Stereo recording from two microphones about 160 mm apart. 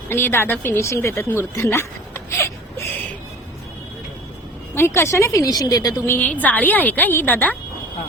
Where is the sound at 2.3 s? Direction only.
15° left (ahead or behind).